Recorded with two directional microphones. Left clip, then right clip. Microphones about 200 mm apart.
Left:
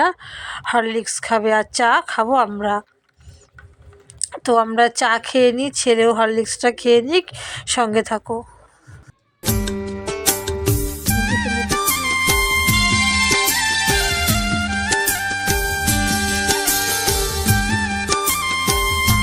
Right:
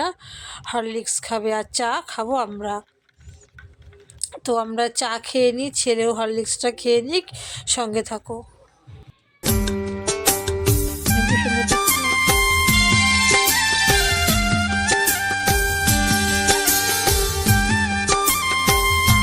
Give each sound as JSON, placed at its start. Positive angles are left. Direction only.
{"t": 0.0, "sound": "speech", "side_deg": 15}
{"t": 4.2, "sound": "speech", "side_deg": 15}
{"t": 9.4, "sound": "music", "side_deg": 0}